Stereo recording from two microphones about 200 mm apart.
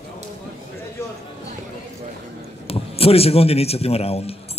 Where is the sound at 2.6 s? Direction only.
30° left (ahead or behind).